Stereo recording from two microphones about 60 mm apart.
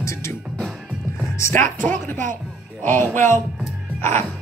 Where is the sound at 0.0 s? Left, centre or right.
Left.